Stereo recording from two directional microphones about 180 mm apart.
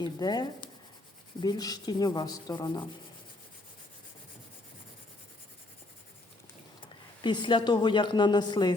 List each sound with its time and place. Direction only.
0.0 s speech: 25° left (ahead or behind)
7.2 s speech: 25° left (ahead or behind)